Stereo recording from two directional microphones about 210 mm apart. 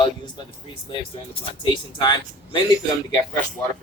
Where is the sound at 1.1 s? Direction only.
25° left (ahead or behind).